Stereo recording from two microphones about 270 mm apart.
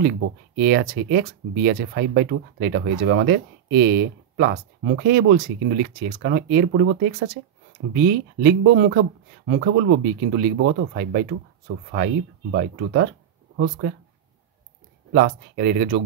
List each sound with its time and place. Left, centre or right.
0.6 s speech: right
15.1 s speech: right